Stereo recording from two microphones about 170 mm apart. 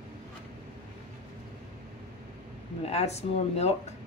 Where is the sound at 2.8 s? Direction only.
40° left (ahead or behind).